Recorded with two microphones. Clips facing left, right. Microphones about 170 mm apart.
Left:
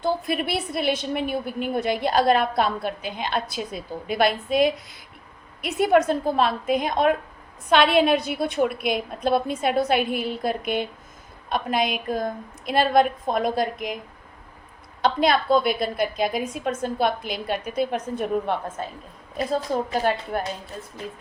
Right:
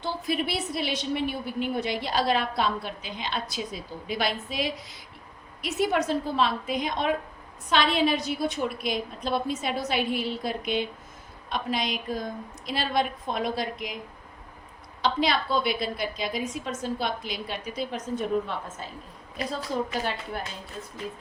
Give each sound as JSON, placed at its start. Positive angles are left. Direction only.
{"t": 0.0, "sound": "a woman's voice", "side_deg": 55}
{"t": 15.0, "sound": "a woman's voice", "side_deg": 50}